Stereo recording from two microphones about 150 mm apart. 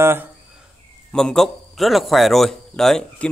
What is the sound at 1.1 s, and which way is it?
A man's voice, 5° left (ahead or behind).